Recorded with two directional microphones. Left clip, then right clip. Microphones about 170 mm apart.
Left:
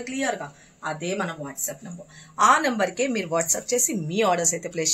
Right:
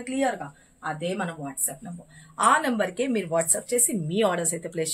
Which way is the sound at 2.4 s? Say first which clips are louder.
Left 3 dB; 20° right (ahead or behind).